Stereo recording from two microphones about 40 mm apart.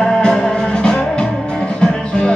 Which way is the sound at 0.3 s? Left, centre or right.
Centre.